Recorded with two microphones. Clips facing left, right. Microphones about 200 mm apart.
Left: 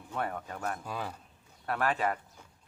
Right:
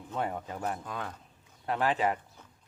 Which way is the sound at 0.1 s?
15° right (ahead or behind).